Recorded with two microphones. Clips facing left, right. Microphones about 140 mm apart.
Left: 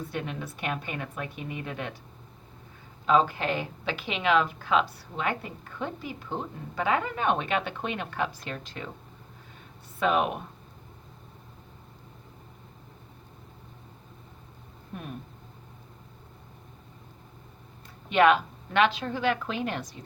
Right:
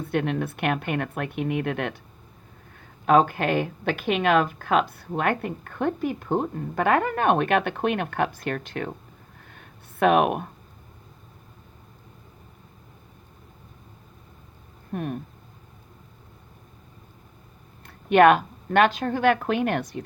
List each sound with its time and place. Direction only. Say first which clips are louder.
0.0 s a woman's voice: right 9 dB; 60° right (ahead or behind)
3.1 s a woman's voice: right 5 dB; 55° right (ahead or behind)
9.6 s a sound: right 7 dB; 60° right (ahead or behind)
14.9 s a woman's voice: right 9 dB; 55° right (ahead or behind)
17.8 s a woman's voice: right 5 dB; 55° right (ahead or behind)